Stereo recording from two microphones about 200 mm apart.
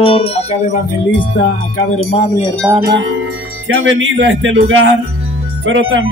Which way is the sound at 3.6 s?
80° right.